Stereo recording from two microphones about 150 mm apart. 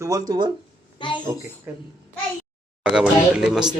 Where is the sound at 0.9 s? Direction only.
35° left (ahead or behind).